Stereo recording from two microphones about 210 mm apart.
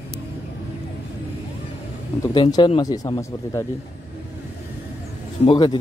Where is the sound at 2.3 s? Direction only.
20° left (ahead or behind).